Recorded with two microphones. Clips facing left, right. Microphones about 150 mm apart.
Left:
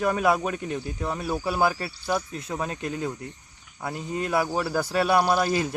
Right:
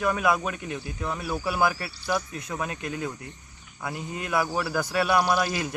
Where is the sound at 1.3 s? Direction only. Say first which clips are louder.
Left 1 dB; 20° left (ahead or behind).